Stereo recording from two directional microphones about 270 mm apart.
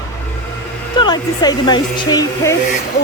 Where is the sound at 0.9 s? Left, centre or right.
Centre.